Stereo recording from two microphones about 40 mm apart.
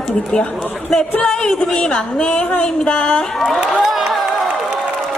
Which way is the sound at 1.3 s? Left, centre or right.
Centre.